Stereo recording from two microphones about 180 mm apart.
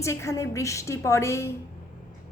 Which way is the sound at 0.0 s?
15° left (ahead or behind).